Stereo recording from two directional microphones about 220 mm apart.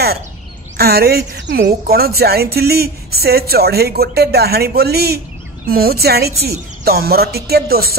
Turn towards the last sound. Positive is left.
turn(degrees=-45)  # may be behind; listen again after turning